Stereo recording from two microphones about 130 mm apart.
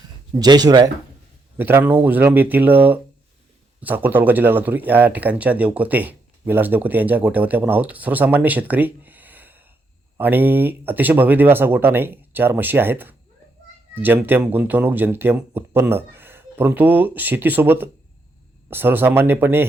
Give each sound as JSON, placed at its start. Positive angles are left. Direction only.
{"t": 0.3, "sound": "speech", "side_deg": -30}
{"t": 1.5, "sound": "speech", "side_deg": -15}